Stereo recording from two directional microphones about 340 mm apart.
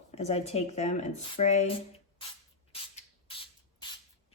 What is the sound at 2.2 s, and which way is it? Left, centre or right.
Spray, centre.